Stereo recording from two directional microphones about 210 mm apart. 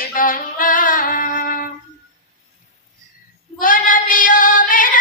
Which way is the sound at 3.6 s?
40° left (ahead or behind).